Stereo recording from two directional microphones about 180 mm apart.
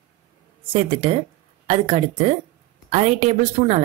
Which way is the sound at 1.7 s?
35° right (ahead or behind).